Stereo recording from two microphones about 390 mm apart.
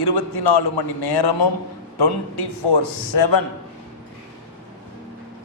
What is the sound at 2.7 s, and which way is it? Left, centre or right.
Speech, left.